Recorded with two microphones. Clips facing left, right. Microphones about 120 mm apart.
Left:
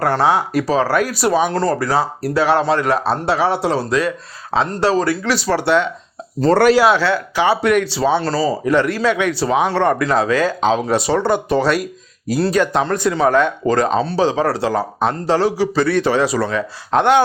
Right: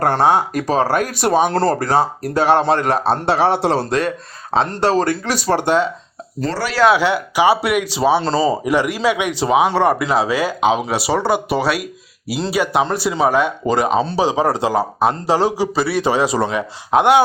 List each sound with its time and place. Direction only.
0.5 s speech: 45° right (ahead or behind)
1.5 s speech: 30° right (ahead or behind)
1.8 s speech: 50° right (ahead or behind)
6.5 s speech: 50° left (ahead or behind)
6.9 s speech: 15° right (ahead or behind)